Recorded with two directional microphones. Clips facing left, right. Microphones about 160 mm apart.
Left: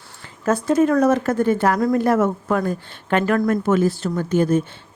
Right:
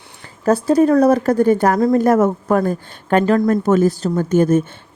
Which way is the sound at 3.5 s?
40° right (ahead or behind).